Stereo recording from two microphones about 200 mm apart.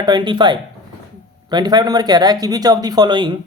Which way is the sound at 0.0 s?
20° right (ahead or behind).